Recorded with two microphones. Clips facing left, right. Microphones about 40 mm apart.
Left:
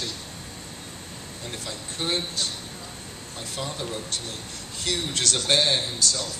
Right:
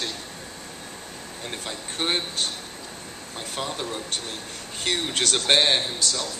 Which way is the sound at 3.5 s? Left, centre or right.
Right.